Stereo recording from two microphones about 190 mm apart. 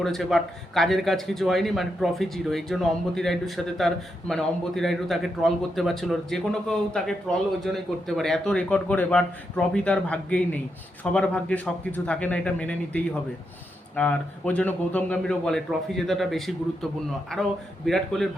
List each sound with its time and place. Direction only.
0.0 s speech: centre (ahead or behind)
17.8 s speech: centre (ahead or behind)